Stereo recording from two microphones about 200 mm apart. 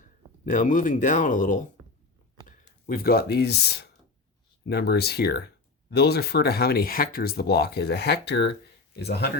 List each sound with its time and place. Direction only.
0.4 s speech: 40° left (ahead or behind)